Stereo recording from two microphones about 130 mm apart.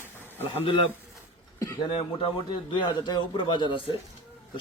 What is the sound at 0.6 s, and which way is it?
Speech, 45° left (ahead or behind).